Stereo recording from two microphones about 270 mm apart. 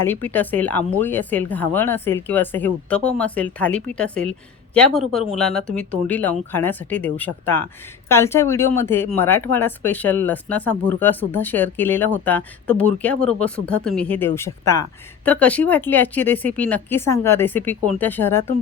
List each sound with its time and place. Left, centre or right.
0.0 s speech: centre